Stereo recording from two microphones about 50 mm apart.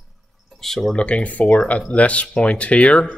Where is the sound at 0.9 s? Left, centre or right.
Left.